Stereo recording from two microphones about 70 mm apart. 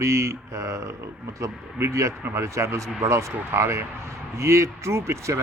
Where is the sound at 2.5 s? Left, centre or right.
Right.